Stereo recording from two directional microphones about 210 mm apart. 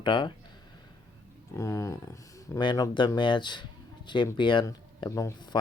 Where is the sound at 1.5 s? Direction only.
15° left (ahead or behind).